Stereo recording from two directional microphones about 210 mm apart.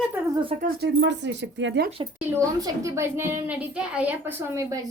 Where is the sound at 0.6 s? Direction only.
50° right (ahead or behind).